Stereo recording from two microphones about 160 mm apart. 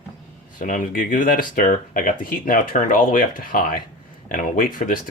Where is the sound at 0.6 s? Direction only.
55° left (ahead or behind).